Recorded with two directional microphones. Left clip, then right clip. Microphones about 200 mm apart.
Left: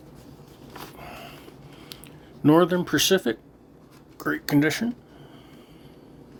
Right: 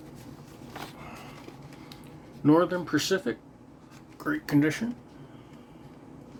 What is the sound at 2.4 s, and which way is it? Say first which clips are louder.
Speech: left 4 dB; 45° left (ahead or behind).